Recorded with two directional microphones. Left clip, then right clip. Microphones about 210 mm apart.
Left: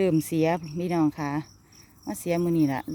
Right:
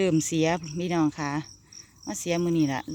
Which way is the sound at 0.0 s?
Centre (ahead or behind).